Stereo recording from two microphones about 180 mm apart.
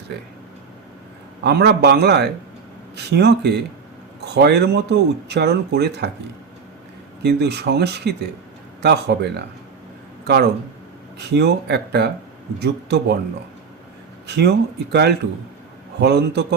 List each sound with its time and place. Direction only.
1.5 s speech: 65° right (ahead or behind)
7.2 s speech: 70° right (ahead or behind)
14.3 s speech: 65° right (ahead or behind)
16.0 s speech: 65° right (ahead or behind)